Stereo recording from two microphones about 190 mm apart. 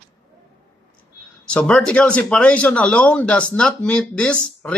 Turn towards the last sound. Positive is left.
turn(degrees=5)  # may be behind; listen again after turning